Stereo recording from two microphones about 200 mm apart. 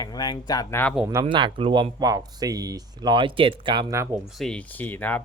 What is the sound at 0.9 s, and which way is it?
Speech, 10° right (ahead or behind).